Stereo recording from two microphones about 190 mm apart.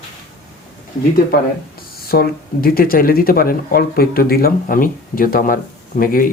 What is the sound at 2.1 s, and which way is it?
Speech, 50° left (ahead or behind).